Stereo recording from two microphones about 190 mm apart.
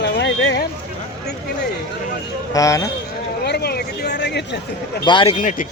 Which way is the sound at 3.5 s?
55° left (ahead or behind).